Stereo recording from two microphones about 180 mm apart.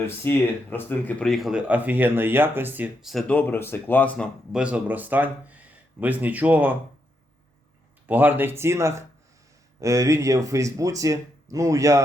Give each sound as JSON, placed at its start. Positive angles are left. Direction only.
{"t": 0.0, "sound": "speech", "side_deg": 10}
{"t": 4.5, "sound": "speech", "side_deg": -5}
{"t": 8.0, "sound": "speech", "side_deg": -10}